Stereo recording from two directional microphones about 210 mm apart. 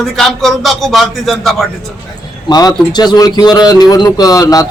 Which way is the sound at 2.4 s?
20° left (ahead or behind).